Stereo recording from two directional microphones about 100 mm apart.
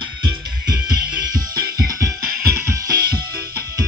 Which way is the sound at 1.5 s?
40° right (ahead or behind).